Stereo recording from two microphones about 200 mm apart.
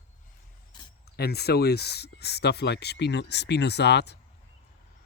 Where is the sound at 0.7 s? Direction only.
20° left (ahead or behind).